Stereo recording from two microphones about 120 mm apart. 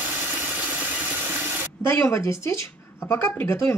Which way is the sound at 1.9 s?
20° left (ahead or behind).